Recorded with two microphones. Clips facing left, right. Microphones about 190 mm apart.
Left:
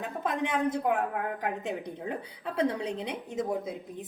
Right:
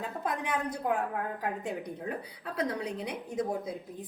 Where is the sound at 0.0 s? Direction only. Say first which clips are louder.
Left 3 dB; 25° left (ahead or behind).